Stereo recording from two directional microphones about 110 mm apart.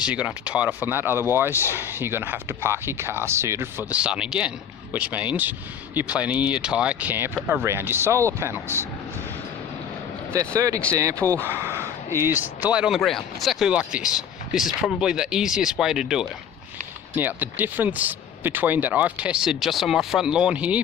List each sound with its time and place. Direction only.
0.0 s speech: 10° right (ahead or behind)
10.3 s speech: 30° right (ahead or behind); by 13.0 s 10° right (ahead or behind)
13.0 s speech: centre (ahead or behind)
17.2 s speech: 15° right (ahead or behind)